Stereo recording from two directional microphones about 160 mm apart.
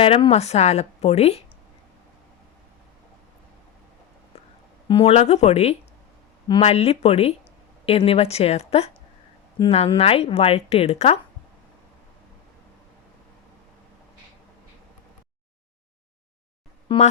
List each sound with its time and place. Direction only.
0.0 s a woman's voice: 35° left (ahead or behind)
4.9 s a woman's voice: 35° left (ahead or behind)
16.9 s a sound: 30° left (ahead or behind)